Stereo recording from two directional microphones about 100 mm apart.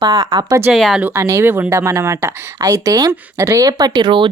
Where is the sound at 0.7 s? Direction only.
Centre (ahead or behind).